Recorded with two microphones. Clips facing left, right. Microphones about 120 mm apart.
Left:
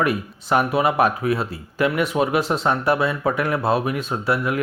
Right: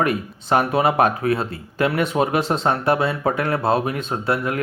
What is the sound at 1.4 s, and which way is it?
Speech, 30° right (ahead or behind).